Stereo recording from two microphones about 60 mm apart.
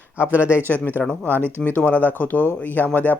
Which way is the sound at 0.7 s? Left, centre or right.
Left.